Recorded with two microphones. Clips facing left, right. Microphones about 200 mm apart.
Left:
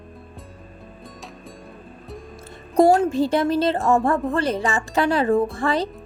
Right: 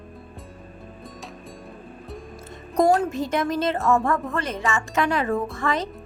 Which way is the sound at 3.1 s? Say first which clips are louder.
Left 5 dB; 30° left (ahead or behind).